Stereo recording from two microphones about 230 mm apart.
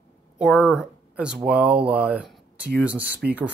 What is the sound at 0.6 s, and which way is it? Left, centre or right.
Speech, centre.